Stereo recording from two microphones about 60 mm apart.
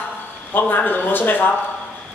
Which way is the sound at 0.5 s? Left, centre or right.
Left.